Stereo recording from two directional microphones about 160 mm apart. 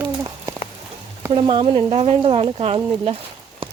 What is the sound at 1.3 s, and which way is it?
Speech, 35° right (ahead or behind).